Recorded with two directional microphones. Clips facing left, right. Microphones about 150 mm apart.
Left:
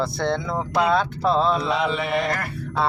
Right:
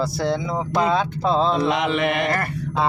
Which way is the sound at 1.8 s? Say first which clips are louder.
Right 2 dB; 75° right (ahead or behind).